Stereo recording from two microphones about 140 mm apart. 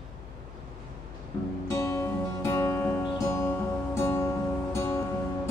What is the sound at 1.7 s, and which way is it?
Music, 20° left (ahead or behind).